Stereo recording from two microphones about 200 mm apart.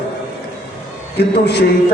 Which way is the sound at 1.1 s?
55° left (ahead or behind).